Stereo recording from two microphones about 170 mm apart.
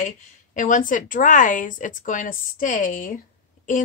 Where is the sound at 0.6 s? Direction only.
50° left (ahead or behind).